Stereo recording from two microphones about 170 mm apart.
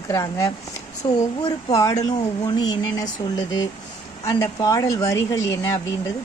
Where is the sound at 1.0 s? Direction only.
30° left (ahead or behind).